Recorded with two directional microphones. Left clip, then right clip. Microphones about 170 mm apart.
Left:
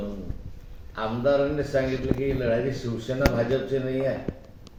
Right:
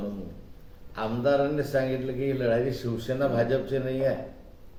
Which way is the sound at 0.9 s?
10° right (ahead or behind).